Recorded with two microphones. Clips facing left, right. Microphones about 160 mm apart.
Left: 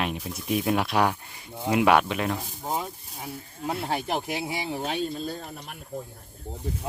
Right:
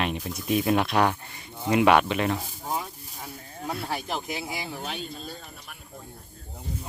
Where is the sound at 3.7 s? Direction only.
25° left (ahead or behind).